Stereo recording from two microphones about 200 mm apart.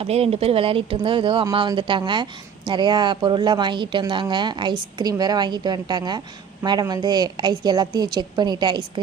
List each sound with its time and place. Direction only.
0.0 s speech: 30° right (ahead or behind)